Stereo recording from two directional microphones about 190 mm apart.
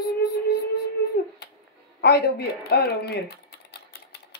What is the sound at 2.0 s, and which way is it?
Speech, 55° left (ahead or behind).